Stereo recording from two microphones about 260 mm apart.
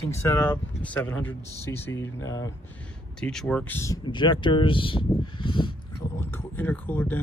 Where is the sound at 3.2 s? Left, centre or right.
Centre.